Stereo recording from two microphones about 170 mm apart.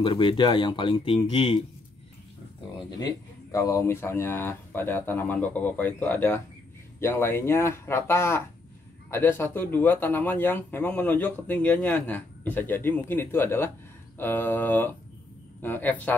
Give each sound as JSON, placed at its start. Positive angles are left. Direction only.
{"t": 0.0, "sound": "speech", "side_deg": 30}
{"t": 3.0, "sound": "speech", "side_deg": 20}